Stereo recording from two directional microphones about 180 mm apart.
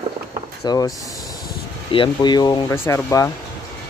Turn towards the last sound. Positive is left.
turn(degrees=15)  # may be behind; listen again after turning